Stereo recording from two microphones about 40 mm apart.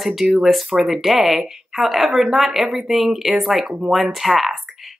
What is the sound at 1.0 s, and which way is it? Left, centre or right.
A woman's voice, centre.